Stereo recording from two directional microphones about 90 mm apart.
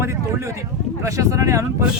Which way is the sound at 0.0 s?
30° right (ahead or behind).